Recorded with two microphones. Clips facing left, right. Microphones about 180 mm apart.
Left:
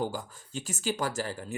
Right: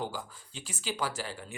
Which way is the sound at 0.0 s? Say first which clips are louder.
Left 4 dB; 45° left (ahead or behind).